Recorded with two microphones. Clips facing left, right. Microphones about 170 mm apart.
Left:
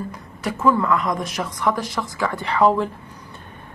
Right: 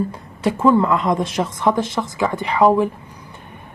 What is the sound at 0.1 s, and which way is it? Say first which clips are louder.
A woman's voice: right 6 dB; 30° right (ahead or behind).